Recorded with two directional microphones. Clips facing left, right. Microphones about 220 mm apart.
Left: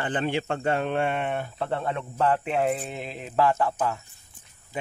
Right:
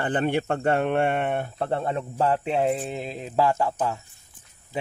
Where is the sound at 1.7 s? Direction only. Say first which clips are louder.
Right 2 dB; 35° right (ahead or behind).